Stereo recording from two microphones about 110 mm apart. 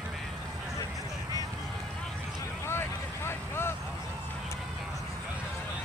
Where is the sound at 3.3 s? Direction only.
20° left (ahead or behind).